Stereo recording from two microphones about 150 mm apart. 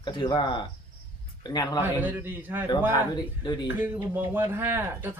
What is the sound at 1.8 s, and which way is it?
Speech, 15° right (ahead or behind).